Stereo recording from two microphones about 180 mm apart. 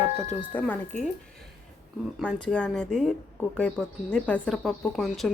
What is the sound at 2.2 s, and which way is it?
A woman's voice, 5° left (ahead or behind).